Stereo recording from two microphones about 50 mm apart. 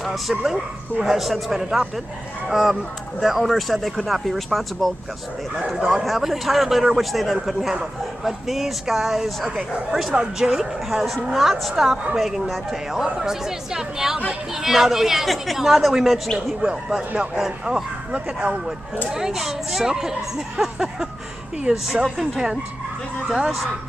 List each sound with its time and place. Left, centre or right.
0.0 s speech: centre
3.2 s speech: centre
6.0 s a woman's voice: centre
16.3 s speech: centre
17.4 s a woman's voice: centre
18.1 s speech: right
19.0 s a woman's voice: centre